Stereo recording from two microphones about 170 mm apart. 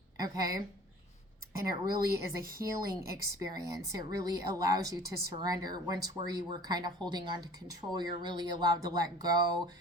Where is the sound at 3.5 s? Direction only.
20° right (ahead or behind).